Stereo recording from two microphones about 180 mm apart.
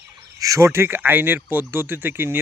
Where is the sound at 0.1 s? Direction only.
20° right (ahead or behind).